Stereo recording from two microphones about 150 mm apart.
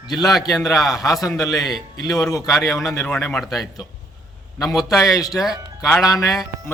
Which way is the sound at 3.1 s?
5° left (ahead or behind).